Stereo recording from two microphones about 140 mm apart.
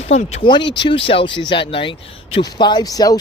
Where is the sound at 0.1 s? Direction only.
50° left (ahead or behind).